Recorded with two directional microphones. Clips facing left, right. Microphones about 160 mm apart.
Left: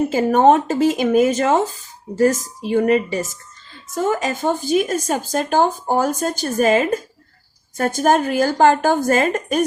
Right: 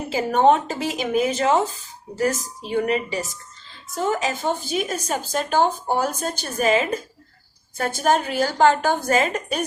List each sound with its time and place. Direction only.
0.1 s speech: 45° left (ahead or behind)